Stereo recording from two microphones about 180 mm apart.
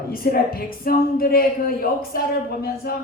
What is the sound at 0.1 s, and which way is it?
Speech, 55° left (ahead or behind).